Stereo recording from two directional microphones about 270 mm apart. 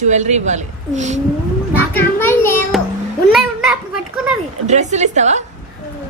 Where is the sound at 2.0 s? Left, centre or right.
Centre.